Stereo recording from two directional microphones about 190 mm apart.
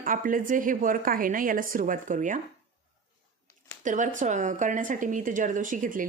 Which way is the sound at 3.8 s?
40° right (ahead or behind).